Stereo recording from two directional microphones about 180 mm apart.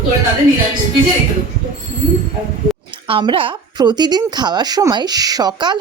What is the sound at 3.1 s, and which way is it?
Speech, 30° right (ahead or behind).